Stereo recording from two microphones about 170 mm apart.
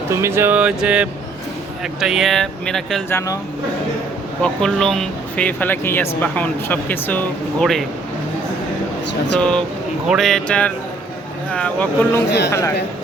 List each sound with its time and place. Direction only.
0.1 s speech: 15° right (ahead or behind); by 3.0 s 5° left (ahead or behind)
3.1 s speech: 15° left (ahead or behind)
4.4 s speech: 5° left (ahead or behind)
9.4 s speech: 5° left (ahead or behind)